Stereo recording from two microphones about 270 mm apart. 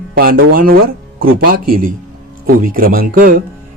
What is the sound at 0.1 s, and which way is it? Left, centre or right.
Speech, right.